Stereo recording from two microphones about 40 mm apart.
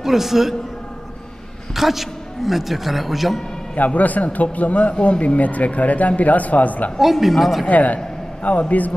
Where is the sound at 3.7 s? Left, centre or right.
Left.